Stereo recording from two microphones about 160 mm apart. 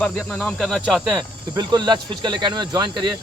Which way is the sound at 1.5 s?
25° right (ahead or behind).